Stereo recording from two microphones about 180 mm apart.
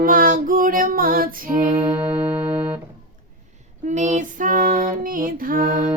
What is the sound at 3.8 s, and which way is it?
Female singing, 40° right (ahead or behind).